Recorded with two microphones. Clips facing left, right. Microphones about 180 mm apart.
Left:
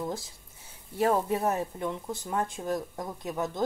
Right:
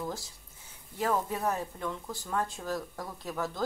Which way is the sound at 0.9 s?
30° left (ahead or behind).